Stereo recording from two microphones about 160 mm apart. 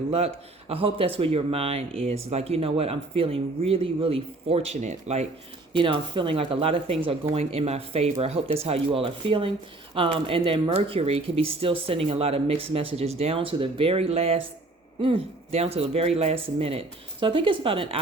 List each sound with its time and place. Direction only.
0.1 s speech: 40° right (ahead or behind)
5.7 s speech: 30° right (ahead or behind)